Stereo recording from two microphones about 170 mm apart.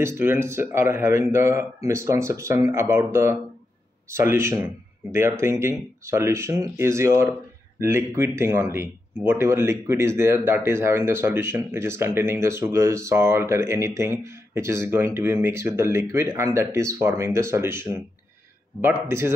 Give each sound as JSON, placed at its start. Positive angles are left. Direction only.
{"t": 0.0, "sound": "speech", "side_deg": -15}
{"t": 19.0, "sound": "speech", "side_deg": -15}